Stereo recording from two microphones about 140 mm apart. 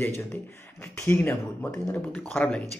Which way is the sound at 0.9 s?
20° left (ahead or behind).